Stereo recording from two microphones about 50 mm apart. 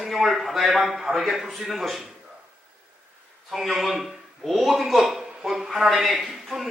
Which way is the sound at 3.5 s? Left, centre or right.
Centre.